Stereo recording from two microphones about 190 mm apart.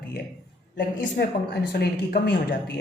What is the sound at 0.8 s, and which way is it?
Speech, 50° left (ahead or behind).